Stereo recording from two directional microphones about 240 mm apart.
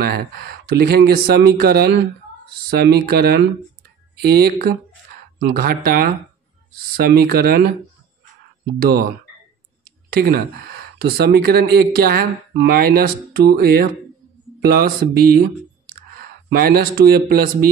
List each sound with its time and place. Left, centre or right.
0.0 s speech: right
9.8 s speech: right